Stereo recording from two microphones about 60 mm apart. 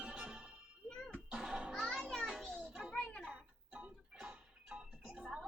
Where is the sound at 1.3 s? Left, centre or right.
Centre.